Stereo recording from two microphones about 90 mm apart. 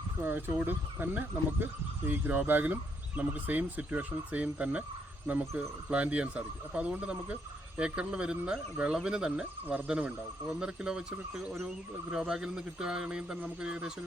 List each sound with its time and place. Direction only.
0.2 s speech: 20° right (ahead or behind)